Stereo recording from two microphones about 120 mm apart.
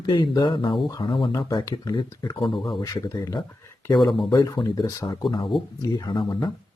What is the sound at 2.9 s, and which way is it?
Speech, 30° left (ahead or behind).